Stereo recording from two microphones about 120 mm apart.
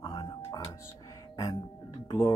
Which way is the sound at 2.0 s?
35° left (ahead or behind).